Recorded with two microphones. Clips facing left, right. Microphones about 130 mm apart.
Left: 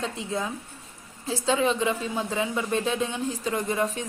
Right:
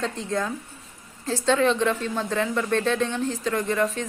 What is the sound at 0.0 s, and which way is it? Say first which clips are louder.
Speech: right 3 dB; 5° left (ahead or behind).